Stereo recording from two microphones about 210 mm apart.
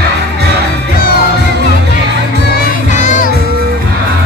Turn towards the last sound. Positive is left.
turn(degrees=35)  # may be behind; listen again after turning